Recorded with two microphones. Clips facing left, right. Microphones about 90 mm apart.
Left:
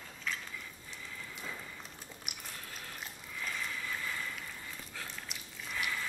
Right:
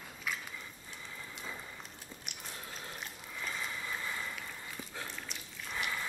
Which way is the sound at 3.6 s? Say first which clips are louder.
Even; 20° right (ahead or behind).